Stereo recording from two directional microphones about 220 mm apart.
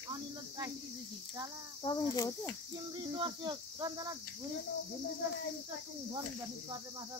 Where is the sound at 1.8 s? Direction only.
20° left (ahead or behind).